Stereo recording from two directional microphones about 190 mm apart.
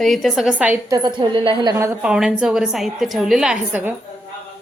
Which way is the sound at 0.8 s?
20° right (ahead or behind).